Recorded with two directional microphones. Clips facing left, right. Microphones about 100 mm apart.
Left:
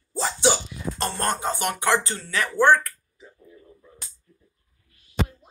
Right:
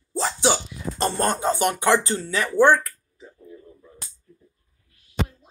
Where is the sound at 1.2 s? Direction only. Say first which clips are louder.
Right 3 dB; 15° right (ahead or behind).